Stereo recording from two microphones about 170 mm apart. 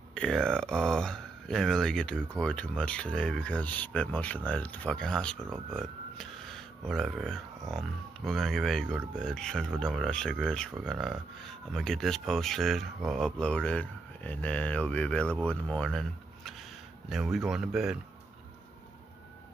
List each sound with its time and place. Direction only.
0.1 s speech: 5° left (ahead or behind)
5.8 s a sound: 5° left (ahead or behind)
7.7 s speech: centre (ahead or behind)